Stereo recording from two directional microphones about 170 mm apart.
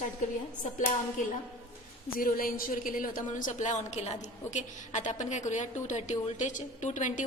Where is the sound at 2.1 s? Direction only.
60° left (ahead or behind).